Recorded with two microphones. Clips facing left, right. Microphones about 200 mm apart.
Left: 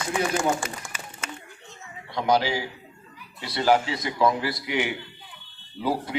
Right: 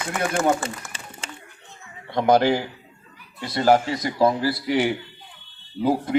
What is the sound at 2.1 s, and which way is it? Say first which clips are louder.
A man's voice: right 5 dB; 55° right (ahead or behind).